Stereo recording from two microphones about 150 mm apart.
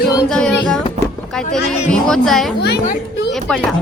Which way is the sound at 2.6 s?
90° left.